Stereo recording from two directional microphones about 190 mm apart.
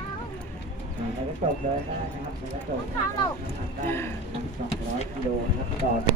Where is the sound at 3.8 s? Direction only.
10° left (ahead or behind).